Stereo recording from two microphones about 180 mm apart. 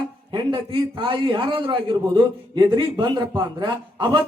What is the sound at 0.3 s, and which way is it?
A man's voice, 30° right (ahead or behind).